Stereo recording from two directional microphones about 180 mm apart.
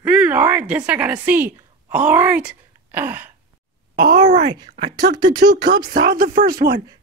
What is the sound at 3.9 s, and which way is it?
Speech, 55° right (ahead or behind).